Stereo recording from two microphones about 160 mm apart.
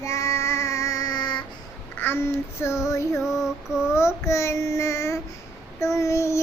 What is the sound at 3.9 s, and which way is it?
Child singing, 15° left (ahead or behind).